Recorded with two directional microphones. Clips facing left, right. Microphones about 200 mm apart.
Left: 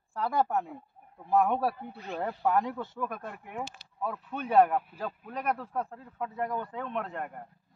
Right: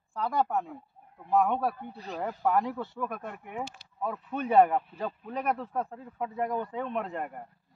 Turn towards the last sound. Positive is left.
turn(degrees=-5)  # may be behind; listen again after turning